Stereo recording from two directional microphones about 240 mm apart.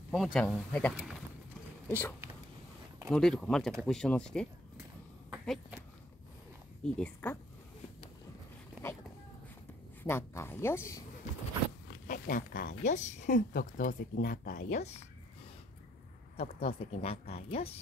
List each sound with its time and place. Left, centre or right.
0.1 s a woman's voice: centre
5.3 s a sound: centre
6.8 s a woman's voice: centre
10.0 s a woman's voice: centre
12.1 s speech: left
16.3 s speech: left